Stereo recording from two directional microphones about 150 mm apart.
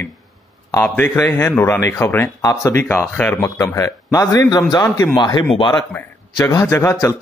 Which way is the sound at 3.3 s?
20° left (ahead or behind).